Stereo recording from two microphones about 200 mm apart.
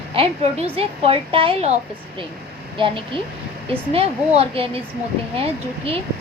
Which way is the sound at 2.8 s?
25° right (ahead or behind).